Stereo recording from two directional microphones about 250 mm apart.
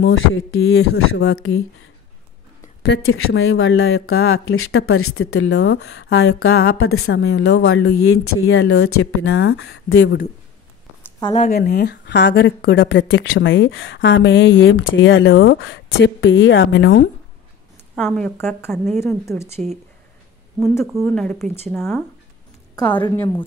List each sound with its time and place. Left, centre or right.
0.0 s speech: left
2.8 s speech: left
5.5 s speech: left
6.7 s speech: left
11.1 s speech: left
11.5 s speech: left
17.9 s a woman's voice: centre
19.2 s speech: centre
19.5 s speech: right
21.0 s a woman's voice: centre